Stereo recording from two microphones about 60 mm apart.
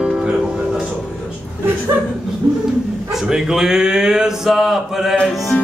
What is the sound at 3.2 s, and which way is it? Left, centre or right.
Mantra, centre.